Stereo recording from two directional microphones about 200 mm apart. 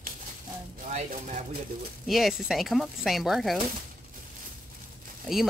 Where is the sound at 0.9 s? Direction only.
40° right (ahead or behind).